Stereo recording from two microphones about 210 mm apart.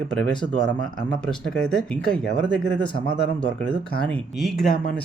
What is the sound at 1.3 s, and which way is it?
Speech, 5° left (ahead or behind).